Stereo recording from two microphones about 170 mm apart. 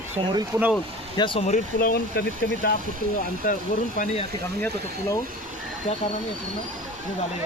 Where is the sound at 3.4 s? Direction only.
50° left (ahead or behind).